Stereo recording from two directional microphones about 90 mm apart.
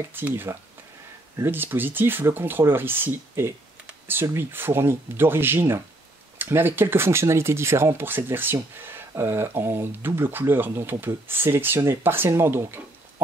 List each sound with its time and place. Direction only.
0.1 s speech: 25° right (ahead or behind)